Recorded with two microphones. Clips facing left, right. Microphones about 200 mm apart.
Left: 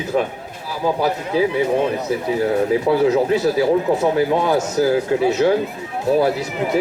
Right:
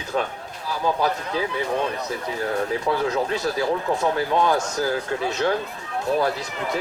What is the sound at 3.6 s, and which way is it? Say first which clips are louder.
Speech: left 6 dB; 20° left (ahead or behind).